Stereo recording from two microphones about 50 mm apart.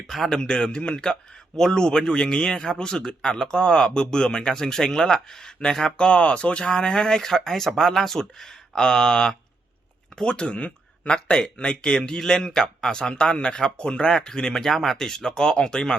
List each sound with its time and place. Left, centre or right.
0.3 s a man's voice: centre